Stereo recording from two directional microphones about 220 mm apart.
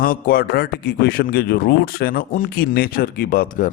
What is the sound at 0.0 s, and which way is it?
A man's voice, 40° left (ahead or behind).